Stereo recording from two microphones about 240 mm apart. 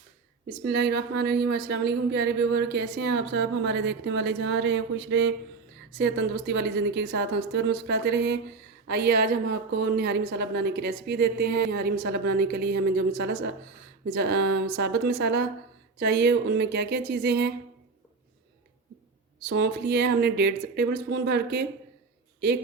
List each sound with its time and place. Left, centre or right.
0.6 s a woman's voice: right
19.5 s a woman's voice: right